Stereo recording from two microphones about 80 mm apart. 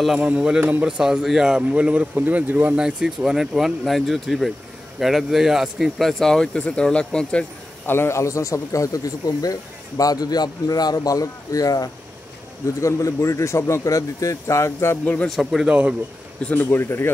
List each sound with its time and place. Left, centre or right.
0.2 s speech: centre
7.8 s a man's voice: left
15.2 s speech: centre
16.5 s a man's voice: left